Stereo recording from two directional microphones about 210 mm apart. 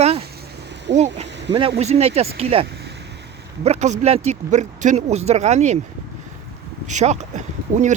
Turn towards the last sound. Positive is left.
turn(degrees=-35)  # may be behind; listen again after turning